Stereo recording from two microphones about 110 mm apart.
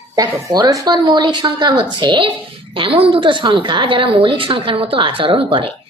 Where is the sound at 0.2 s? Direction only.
35° right (ahead or behind).